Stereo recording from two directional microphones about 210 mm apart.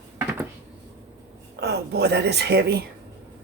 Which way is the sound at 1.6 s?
50° right (ahead or behind).